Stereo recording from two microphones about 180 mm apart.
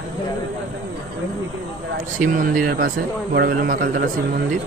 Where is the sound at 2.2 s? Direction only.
50° right (ahead or behind).